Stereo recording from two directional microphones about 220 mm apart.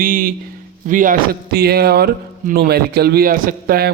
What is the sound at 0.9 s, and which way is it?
Speech, 40° right (ahead or behind).